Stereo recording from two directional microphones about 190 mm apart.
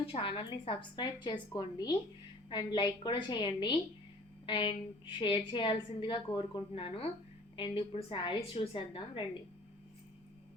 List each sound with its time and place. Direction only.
0.0 s a woman's voice: 30° left (ahead or behind)